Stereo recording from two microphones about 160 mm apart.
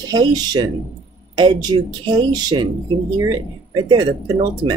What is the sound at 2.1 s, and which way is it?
Speech, 30° right (ahead or behind).